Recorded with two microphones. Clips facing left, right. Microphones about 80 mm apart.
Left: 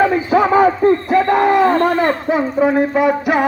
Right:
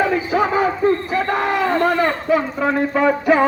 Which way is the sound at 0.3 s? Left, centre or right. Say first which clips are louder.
Left 6 dB; left.